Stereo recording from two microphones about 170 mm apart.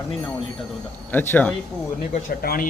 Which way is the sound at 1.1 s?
10° left (ahead or behind).